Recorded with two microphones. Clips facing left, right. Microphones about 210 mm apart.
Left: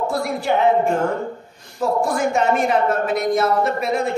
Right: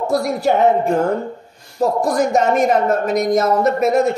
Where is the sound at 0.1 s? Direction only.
40° right (ahead or behind).